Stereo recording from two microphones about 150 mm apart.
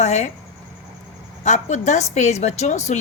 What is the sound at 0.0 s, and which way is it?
Speech, 50° left (ahead or behind).